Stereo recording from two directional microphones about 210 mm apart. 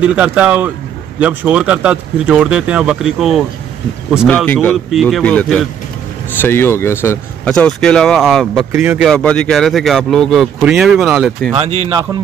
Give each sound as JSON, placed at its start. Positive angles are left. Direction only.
{"t": 0.1, "sound": "speech", "side_deg": -5}
{"t": 9.1, "sound": "speech", "side_deg": 5}
{"t": 11.8, "sound": "speech", "side_deg": -20}